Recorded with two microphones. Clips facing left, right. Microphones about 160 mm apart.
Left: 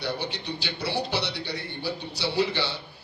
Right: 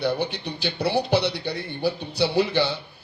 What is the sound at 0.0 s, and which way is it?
A man's voice, 55° right (ahead or behind).